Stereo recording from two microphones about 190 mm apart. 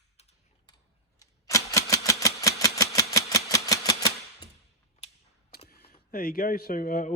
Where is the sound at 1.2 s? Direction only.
15° left (ahead or behind).